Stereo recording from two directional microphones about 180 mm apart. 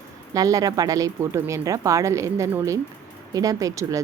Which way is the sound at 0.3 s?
20° right (ahead or behind).